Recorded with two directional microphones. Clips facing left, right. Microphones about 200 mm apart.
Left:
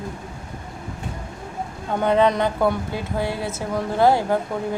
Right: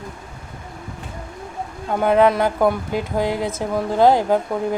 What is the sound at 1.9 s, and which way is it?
Speech, 10° right (ahead or behind).